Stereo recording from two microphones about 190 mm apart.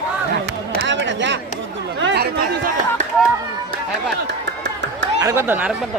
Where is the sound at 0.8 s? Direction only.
70° right (ahead or behind).